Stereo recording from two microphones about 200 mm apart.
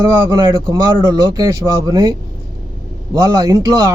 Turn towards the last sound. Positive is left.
turn(degrees=-15)  # may be behind; listen again after turning